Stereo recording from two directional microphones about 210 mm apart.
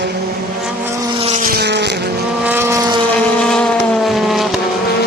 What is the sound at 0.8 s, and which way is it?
Vehicle, 15° right (ahead or behind).